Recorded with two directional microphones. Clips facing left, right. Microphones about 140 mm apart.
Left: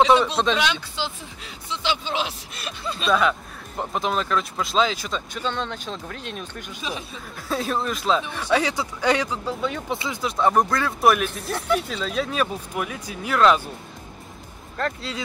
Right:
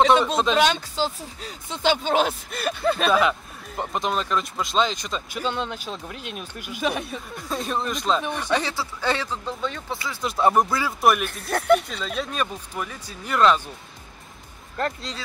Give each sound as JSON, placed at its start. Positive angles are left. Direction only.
{"t": 0.0, "sound": "speech", "side_deg": 0}
{"t": 0.6, "sound": "speech", "side_deg": -45}
{"t": 3.1, "sound": "speech", "side_deg": -5}
{"t": 5.3, "sound": "speech", "side_deg": -10}
{"t": 6.8, "sound": "speech", "side_deg": -60}
{"t": 7.3, "sound": "speech", "side_deg": 0}
{"t": 10.2, "sound": "speech", "side_deg": -5}
{"t": 11.5, "sound": "speech", "side_deg": -60}
{"t": 11.9, "sound": "speech", "side_deg": 0}